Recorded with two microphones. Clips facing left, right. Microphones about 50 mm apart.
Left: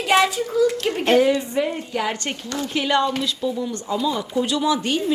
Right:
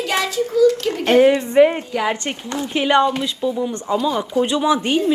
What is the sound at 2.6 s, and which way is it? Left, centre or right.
Speech, right.